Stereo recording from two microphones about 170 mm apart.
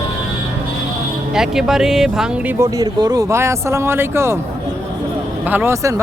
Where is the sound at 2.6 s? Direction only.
20° right (ahead or behind).